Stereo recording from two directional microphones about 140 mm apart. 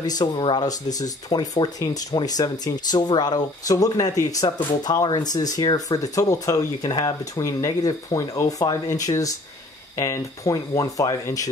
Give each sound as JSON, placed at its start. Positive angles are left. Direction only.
{"t": 0.0, "sound": "speech", "side_deg": 30}